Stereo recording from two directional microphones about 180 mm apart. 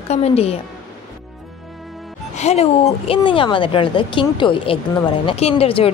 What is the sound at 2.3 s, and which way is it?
A woman's voice, 35° left (ahead or behind).